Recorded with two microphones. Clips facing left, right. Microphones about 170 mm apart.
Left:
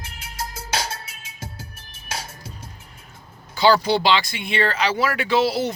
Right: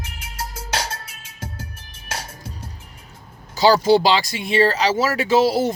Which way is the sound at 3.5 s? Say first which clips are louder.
Right 3 dB; 40° right (ahead or behind).